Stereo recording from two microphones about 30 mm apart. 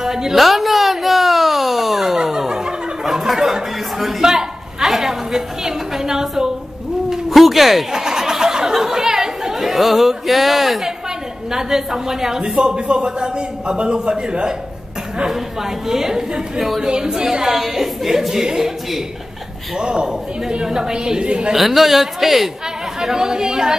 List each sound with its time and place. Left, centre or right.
0.0 s a woman's voice: centre
0.4 s a sound: centre
2.3 s a sound: centre
4.2 s a woman's voice: centre
7.1 s bird: centre
7.9 s a sound: centre
11.5 s speech: centre; by 14.5 s right
15.2 s a woman's voice: centre
16.8 s a woman's voice: right
19.8 s speech: right
21.5 s a woman's voice: centre
22.9 s speech: centre